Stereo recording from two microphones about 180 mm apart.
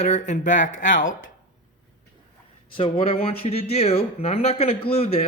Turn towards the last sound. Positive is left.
turn(degrees=35)  # may be behind; listen again after turning